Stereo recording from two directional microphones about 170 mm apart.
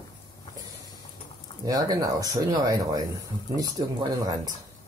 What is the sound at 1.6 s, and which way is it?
Speech, 20° right (ahead or behind).